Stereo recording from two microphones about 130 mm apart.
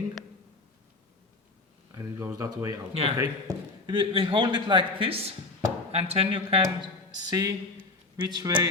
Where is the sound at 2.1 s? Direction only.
25° right (ahead or behind); by 6.6 s 50° right (ahead or behind).